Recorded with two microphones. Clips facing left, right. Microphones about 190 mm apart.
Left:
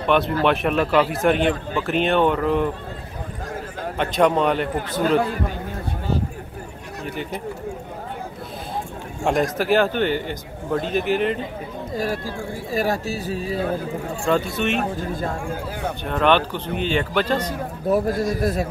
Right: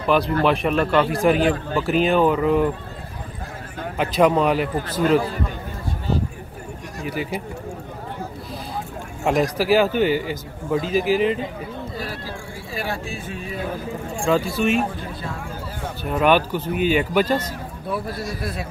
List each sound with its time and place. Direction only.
0.0 s a man's voice: centre (ahead or behind)
4.0 s a man's voice: centre (ahead or behind)
7.0 s speech: 5° right (ahead or behind)
9.2 s a man's voice: centre (ahead or behind)
12.7 s speech: 40° left (ahead or behind)
14.2 s a man's voice: centre (ahead or behind)
15.0 s speech: 45° left (ahead or behind)
16.0 s speech: 5° right (ahead or behind)
17.8 s speech: 45° left (ahead or behind)